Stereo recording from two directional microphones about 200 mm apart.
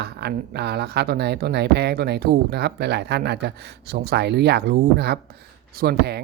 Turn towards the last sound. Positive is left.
turn(degrees=-50)  # may be behind; listen again after turning